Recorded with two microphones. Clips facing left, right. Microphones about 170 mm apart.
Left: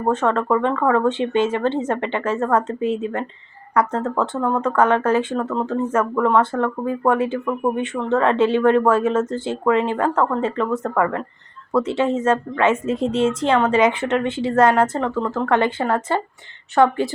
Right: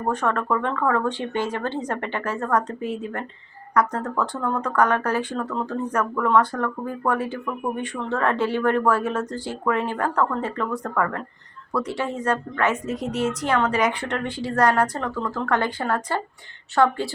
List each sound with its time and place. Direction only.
0.1 s speech: 25° left (ahead or behind)